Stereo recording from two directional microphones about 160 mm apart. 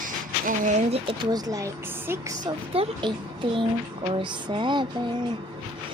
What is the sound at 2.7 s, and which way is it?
Speech, 35° right (ahead or behind).